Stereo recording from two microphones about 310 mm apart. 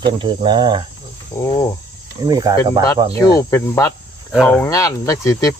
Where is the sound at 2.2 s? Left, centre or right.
Centre.